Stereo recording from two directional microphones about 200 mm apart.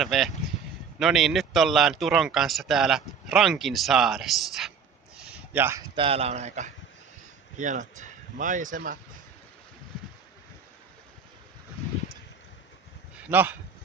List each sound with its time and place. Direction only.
0.0 s speech: centre (ahead or behind)
5.1 s a sound: 5° right (ahead or behind)
6.0 s speech: 30° right (ahead or behind)
13.3 s speech: 10° right (ahead or behind)